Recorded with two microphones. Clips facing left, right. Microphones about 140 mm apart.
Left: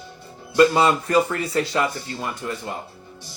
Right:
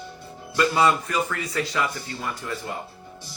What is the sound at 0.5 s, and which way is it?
Speech, 35° left (ahead or behind).